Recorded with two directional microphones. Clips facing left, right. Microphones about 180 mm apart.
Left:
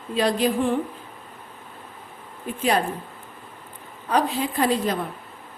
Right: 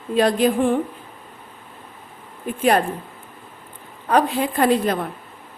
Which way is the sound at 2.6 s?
55° right (ahead or behind).